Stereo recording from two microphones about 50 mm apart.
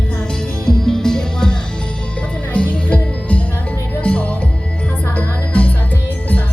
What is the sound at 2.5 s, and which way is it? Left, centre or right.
Music, left.